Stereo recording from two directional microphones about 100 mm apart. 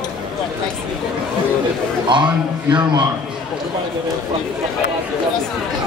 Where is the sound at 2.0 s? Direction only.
50° right (ahead or behind).